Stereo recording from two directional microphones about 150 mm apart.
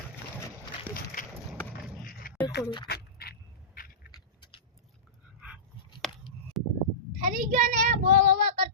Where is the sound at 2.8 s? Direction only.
90° left.